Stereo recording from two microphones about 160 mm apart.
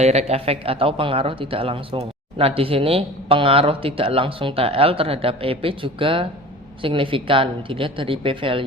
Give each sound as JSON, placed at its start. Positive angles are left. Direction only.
{"t": 0.0, "sound": "speech", "side_deg": -40}